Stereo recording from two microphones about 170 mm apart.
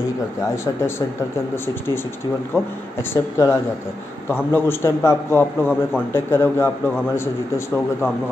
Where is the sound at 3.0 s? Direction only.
15° left (ahead or behind).